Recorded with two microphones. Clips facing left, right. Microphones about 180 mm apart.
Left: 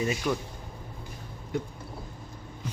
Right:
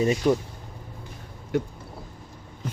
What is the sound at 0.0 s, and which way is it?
Speech, 30° right (ahead or behind).